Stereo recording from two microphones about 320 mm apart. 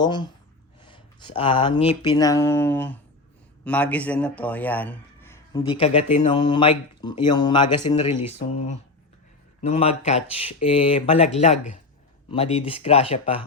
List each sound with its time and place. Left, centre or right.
0.0 s a man's voice: centre